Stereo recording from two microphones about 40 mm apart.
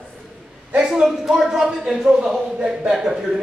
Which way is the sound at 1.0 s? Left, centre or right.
Centre.